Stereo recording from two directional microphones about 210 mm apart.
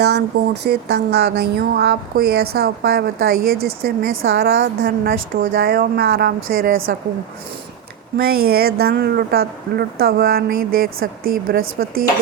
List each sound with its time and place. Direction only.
0.0 s speech: 50° right (ahead or behind)
4.1 s a woman's voice: 70° right (ahead or behind)
4.4 s speech: 45° right (ahead or behind)
8.2 s speech: 45° right (ahead or behind)